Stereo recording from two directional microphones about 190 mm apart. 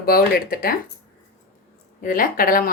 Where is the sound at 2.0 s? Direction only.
45° left (ahead or behind).